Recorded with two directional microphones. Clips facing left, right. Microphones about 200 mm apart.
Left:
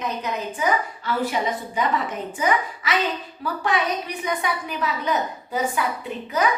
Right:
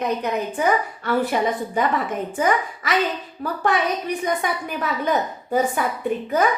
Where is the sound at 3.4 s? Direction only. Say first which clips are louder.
Right 2 dB; 50° right (ahead or behind).